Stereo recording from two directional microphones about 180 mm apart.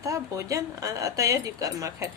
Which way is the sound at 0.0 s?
15° right (ahead or behind).